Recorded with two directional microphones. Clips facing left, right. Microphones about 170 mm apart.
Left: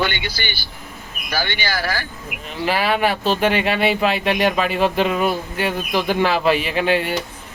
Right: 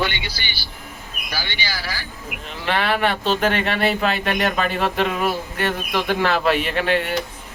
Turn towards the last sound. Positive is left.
turn(degrees=5)  # may be behind; listen again after turning